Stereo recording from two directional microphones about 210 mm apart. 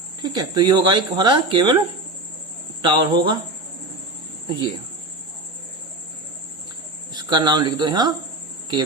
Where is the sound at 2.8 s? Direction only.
20° right (ahead or behind).